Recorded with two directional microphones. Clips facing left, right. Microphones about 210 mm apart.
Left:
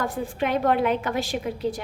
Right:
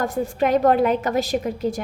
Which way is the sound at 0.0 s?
45° right (ahead or behind).